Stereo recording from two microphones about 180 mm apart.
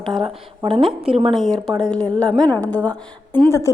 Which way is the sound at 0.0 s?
25° right (ahead or behind).